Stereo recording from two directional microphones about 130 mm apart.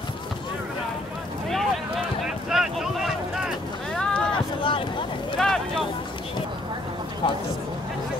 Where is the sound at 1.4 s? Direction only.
Centre (ahead or behind).